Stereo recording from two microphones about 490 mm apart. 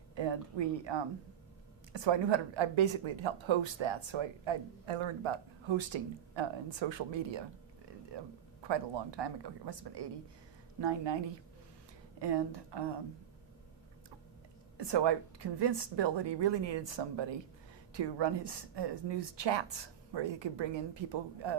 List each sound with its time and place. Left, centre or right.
0.2 s a woman's voice: right
12.2 s speech: right
14.8 s a woman's voice: right